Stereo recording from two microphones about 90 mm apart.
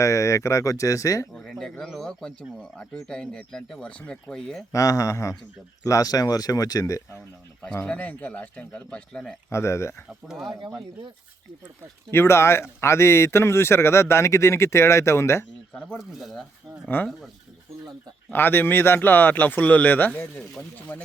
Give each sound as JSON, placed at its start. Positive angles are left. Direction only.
{"t": 0.0, "sound": "a man's voice", "side_deg": 35}
{"t": 1.3, "sound": "a sound", "side_deg": 5}
{"t": 1.8, "sound": "speech", "side_deg": 5}
{"t": 4.7, "sound": "a man's voice", "side_deg": 40}
{"t": 7.2, "sound": "a sound", "side_deg": 10}
{"t": 7.9, "sound": "speech", "side_deg": 15}
{"t": 9.5, "sound": "a man's voice", "side_deg": 30}
{"t": 10.2, "sound": "speech", "side_deg": -5}
{"t": 12.1, "sound": "a man's voice", "side_deg": 30}
{"t": 15.7, "sound": "speech", "side_deg": 15}
{"t": 16.0, "sound": "speech", "side_deg": 0}
{"t": 18.3, "sound": "a man's voice", "side_deg": 25}